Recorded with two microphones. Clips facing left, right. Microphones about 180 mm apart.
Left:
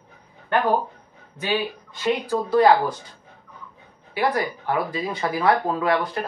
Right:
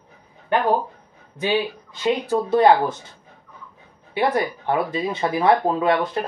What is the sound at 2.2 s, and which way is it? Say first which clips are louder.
Speech: right 1 dB; 25° right (ahead or behind).